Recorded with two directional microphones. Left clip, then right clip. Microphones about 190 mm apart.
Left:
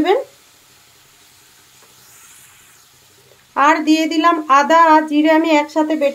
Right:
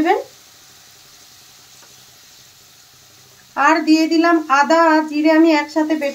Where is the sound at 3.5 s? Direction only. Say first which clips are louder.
Left 1 dB; 45° left (ahead or behind).